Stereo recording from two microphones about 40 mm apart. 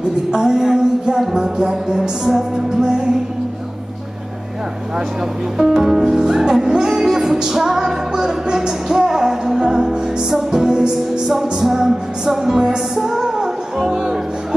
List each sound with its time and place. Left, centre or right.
0.3 s music: centre
5.6 s music: centre